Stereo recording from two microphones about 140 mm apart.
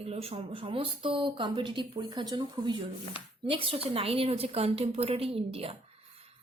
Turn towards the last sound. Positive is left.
turn(degrees=-45)  # may be behind; listen again after turning